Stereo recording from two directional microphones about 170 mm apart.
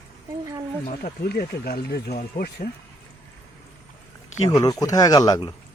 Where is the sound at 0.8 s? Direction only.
60° left (ahead or behind).